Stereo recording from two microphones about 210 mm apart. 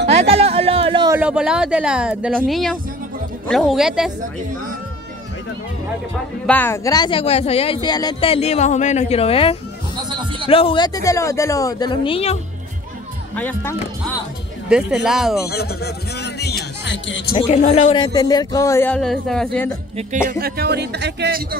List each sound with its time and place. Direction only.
0.1 s a sound: 30° right (ahead or behind)
1.1 s a woman's voice: 5° right (ahead or behind)
6.4 s speech: 10° left (ahead or behind); by 12.4 s 25° left (ahead or behind)
13.4 s speech: 10° left (ahead or behind)
14.7 s a woman's voice: centre (ahead or behind)
15.4 s speech: 50° left (ahead or behind)
17.3 s speech: 30° left (ahead or behind); by 19.7 s 5° left (ahead or behind)
20.2 s music: 45° right (ahead or behind)